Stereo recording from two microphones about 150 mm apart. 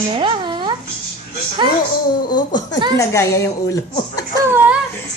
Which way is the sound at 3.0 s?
20° left (ahead or behind).